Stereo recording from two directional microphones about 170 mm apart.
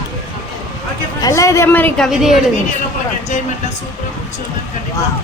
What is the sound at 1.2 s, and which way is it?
Speech, 20° left (ahead or behind).